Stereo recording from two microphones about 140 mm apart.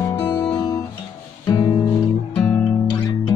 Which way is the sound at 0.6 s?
30° left (ahead or behind).